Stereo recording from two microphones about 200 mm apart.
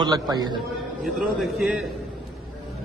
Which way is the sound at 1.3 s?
Centre (ahead or behind).